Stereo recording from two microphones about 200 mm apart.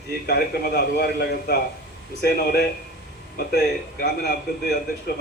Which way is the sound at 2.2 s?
55° left (ahead or behind).